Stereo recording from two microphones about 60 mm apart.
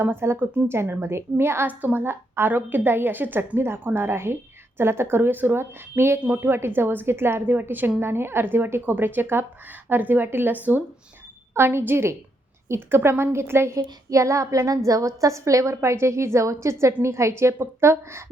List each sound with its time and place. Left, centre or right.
0.0 s a woman's voice: right
1.6 s a woman's voice: right
11.5 s a woman's voice: right
13.7 s a woman's voice: right